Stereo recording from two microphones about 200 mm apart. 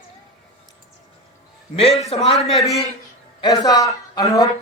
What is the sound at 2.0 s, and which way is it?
Speech, 30° left (ahead or behind).